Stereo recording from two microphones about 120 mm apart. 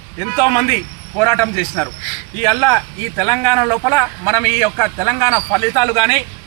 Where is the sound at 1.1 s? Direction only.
20° left (ahead or behind).